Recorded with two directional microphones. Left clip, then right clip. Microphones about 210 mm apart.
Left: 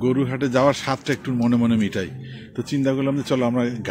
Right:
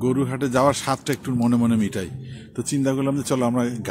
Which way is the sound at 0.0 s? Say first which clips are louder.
Left 1 dB; 10° right (ahead or behind).